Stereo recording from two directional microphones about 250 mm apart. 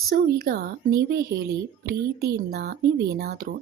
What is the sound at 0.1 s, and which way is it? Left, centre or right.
A woman's voice, right.